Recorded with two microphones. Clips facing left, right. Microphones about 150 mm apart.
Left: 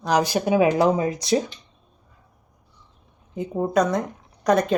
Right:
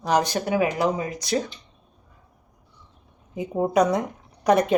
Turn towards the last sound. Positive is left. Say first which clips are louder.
# even
turn(degrees=-10)  # may be behind; listen again after turning